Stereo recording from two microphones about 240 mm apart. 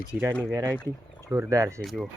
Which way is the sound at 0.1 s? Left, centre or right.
Centre.